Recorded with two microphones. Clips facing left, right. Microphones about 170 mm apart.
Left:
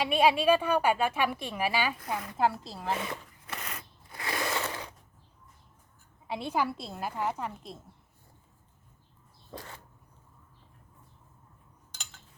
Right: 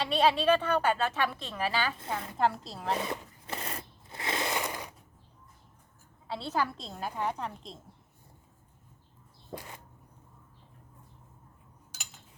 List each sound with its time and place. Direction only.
0.0 s a woman's voice: 10° left (ahead or behind)
2.4 s a woman's voice: centre (ahead or behind)
3.0 s a sound: 30° right (ahead or behind); by 4.9 s 15° right (ahead or behind)
6.2 s a woman's voice: 15° left (ahead or behind)